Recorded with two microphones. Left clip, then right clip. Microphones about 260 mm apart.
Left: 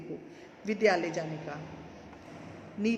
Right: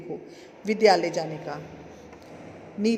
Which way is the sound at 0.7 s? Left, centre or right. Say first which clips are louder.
Right 7 dB; right.